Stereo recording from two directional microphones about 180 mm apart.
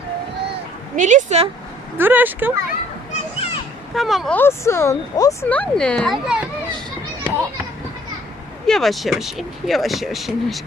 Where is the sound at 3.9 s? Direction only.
Centre (ahead or behind).